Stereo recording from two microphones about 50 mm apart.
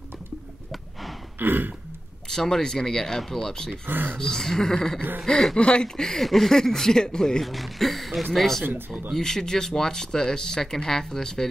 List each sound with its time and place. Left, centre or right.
1.4 s burping: right
2.2 s speech: centre
3.7 s speech: right
4.2 s speech: centre
7.4 s speech: centre